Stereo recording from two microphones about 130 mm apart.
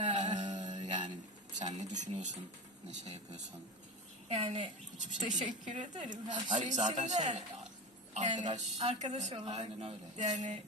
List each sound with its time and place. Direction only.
0.0 s music: 65° right (ahead or behind)
1.5 s a woman's voice: 65° right (ahead or behind)
4.3 s a child's voice: 50° right (ahead or behind)
4.9 s a woman's voice: 70° right (ahead or behind)